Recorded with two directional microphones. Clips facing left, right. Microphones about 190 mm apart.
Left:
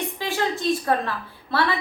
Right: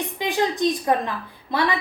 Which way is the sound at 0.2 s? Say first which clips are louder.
Right 5 dB; 15° right (ahead or behind).